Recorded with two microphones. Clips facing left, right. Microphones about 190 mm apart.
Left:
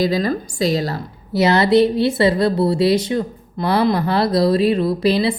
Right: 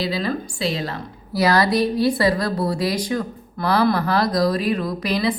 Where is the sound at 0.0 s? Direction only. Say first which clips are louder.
Left 5 dB; 45° left (ahead or behind).